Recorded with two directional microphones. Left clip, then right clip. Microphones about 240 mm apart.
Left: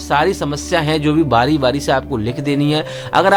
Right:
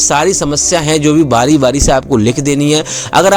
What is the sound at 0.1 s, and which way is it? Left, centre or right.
Speech, right.